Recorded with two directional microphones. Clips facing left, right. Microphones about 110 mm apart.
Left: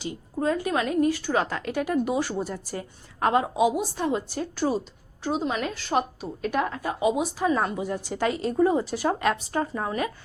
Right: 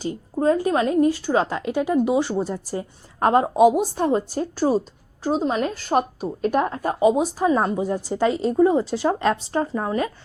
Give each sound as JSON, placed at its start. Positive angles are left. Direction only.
{"t": 0.0, "sound": "a woman's voice", "side_deg": -35}
{"t": 3.2, "sound": "a woman's voice", "side_deg": -40}